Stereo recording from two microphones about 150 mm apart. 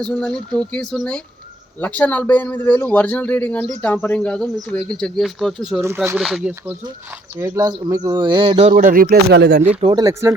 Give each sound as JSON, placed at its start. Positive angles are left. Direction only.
{"t": 0.0, "sound": "a man's voice", "side_deg": 5}
{"t": 7.3, "sound": "speech", "side_deg": -20}
{"t": 8.7, "sound": "speech", "side_deg": -70}
{"t": 10.0, "sound": "speech", "side_deg": -20}